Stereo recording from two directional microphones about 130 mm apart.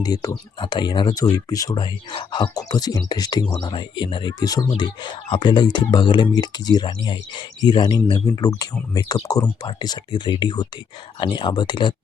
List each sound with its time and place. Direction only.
0.0 s speech: 30° left (ahead or behind)